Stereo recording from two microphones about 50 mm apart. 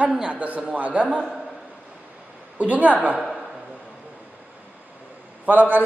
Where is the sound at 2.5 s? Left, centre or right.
Right.